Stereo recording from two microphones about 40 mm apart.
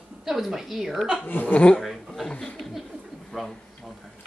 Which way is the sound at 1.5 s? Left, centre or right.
Left.